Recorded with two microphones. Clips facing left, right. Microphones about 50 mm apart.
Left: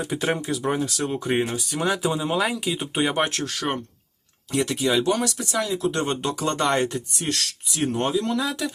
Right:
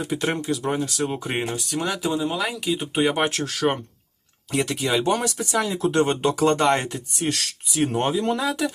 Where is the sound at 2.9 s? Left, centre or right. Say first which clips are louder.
Right 1 dB; centre.